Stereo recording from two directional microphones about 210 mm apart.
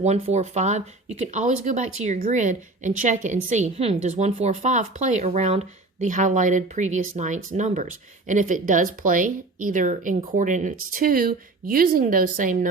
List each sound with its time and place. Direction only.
0.0 s a woman's voice: 30° right (ahead or behind)